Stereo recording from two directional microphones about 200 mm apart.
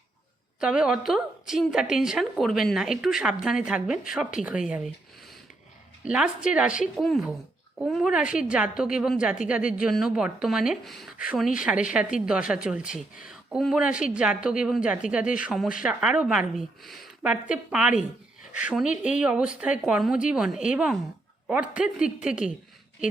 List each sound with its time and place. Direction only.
0.6 s a woman's voice: 5° right (ahead or behind)
6.1 s a woman's voice: 5° right (ahead or behind)